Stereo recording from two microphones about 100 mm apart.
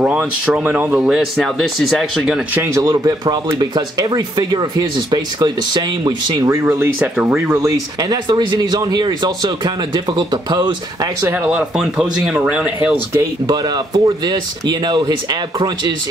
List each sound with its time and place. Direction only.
0.0 s speech: 10° right (ahead or behind)
1.0 s speech: 5° right (ahead or behind)
2.6 s speech: 30° right (ahead or behind)
2.9 s speech: 40° right (ahead or behind)
6.4 s speech: 30° right (ahead or behind)
7.2 s speech: 10° right (ahead or behind)
7.5 s speech: 35° right (ahead or behind)
11.1 s speech: 25° right (ahead or behind)
11.7 s speech: 5° right (ahead or behind)
13.5 s speech: 45° right (ahead or behind)